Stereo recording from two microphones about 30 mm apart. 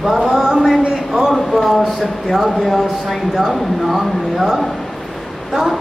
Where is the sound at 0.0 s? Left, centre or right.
Centre.